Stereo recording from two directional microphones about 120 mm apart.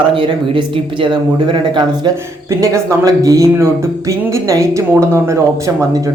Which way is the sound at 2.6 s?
25° right (ahead or behind).